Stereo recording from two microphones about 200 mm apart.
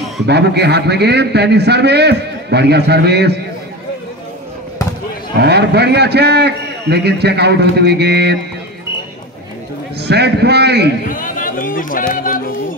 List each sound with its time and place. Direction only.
0.3 s a man's voice: 55° right (ahead or behind)
5.4 s a man's voice: 55° right (ahead or behind)
9.9 s a man's voice: 55° right (ahead or behind)
11.1 s a sound: 45° left (ahead or behind)